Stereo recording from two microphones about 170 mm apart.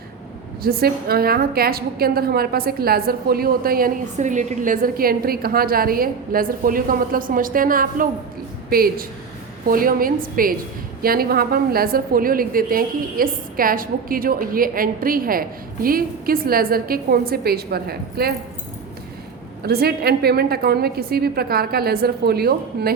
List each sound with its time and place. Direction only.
0.6 s a woman's voice: 65° right (ahead or behind)
19.6 s a woman's voice: 65° right (ahead or behind)